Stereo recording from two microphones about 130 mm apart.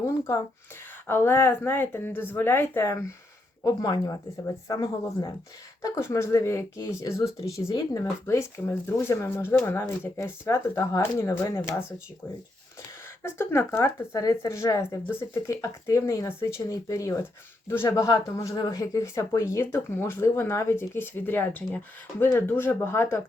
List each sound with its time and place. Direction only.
0.0 s a sound: 25° left (ahead or behind)
1.0 s speech: 20° left (ahead or behind)
3.6 s speech: 30° left (ahead or behind)
13.2 s speech: 20° left (ahead or behind)